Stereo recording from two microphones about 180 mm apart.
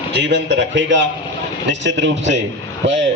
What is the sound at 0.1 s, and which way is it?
A man's voice, 75° right (ahead or behind).